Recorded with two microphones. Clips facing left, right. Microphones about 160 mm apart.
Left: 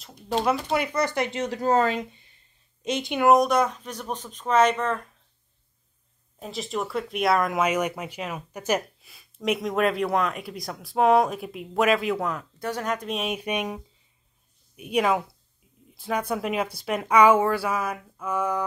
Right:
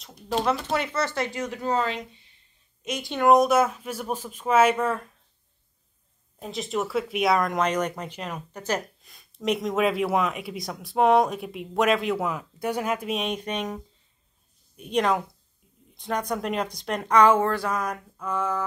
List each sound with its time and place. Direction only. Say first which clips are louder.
0.0 s speech: left 1 dB; centre (ahead or behind)
0.5 s speech: left 3 dB; 10° left (ahead or behind); by 1.7 s 30° left (ahead or behind)
1.7 s speech: left 4 dB; 45° left (ahead or behind)
2.8 s a woman's voice: left 4 dB; 30° left (ahead or behind)
3.1 s speech: right 1 dB; 5° left (ahead or behind)
6.4 s speech: right 2 dB; centre (ahead or behind)